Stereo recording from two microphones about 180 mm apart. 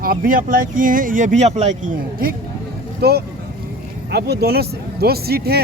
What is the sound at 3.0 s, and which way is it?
Speech, 65° right (ahead or behind).